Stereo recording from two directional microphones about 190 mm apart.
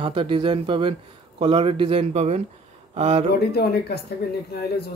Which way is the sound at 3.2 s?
55° left (ahead or behind).